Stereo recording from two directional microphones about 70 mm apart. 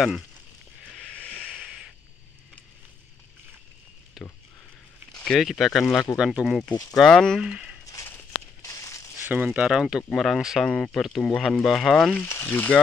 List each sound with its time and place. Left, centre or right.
0.9 s a sound: centre
4.2 s speech: centre
7.0 s speech: centre
7.3 s speech: centre
8.6 s a sound: left
9.2 s speech: right
9.5 s speech: centre
10.1 s speech: centre
12.3 s speech: left